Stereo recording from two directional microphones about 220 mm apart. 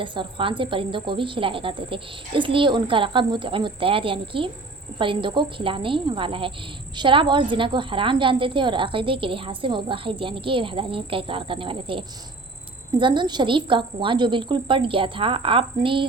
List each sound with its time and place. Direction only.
0.0 s a woman's voice: 20° right (ahead or behind)